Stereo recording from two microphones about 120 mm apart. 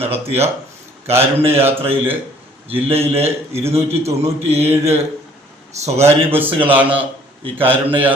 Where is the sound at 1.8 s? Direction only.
50° right (ahead or behind).